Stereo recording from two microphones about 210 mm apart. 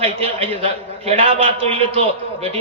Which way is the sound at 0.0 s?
30° right (ahead or behind).